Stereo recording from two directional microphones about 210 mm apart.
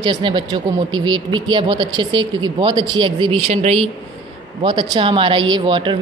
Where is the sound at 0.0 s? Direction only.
20° right (ahead or behind).